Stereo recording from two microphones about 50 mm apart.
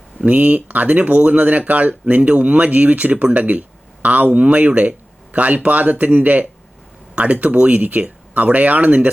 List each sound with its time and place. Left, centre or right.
0.3 s speech: right